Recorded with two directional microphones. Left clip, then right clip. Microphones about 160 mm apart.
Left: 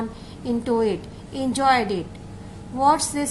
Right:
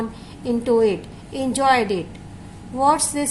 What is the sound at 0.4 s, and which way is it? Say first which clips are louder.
A woman's voice: right 4 dB; 30° right (ahead or behind).